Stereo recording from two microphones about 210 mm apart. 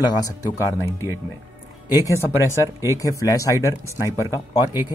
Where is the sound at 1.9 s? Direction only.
15° left (ahead or behind).